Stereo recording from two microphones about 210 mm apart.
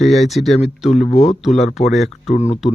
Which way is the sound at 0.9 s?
30° left (ahead or behind).